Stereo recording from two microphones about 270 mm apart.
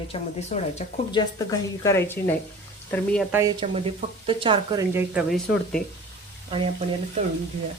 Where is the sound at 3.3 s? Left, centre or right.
Centre.